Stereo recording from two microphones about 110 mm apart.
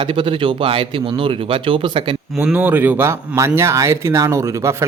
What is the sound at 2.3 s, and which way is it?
Speech, 20° right (ahead or behind).